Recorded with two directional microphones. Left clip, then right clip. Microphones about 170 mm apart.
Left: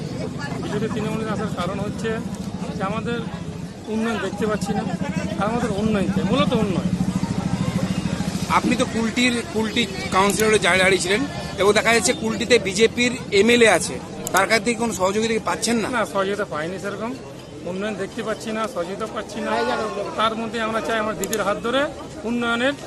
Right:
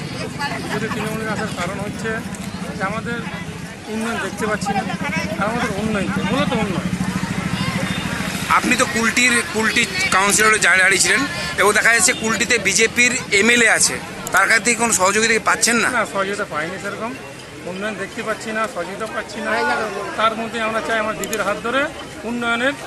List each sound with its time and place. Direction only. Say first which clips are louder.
6.3 s speech: left 1 dB; 30° left (ahead or behind)
8.5 s speech: right 3 dB; 10° left (ahead or behind)
16.0 s speech: right 2 dB; 20° left (ahead or behind)
20.1 s speech: right 4 dB; 25° left (ahead or behind)
22.4 s speech: right 3 dB; 25° left (ahead or behind)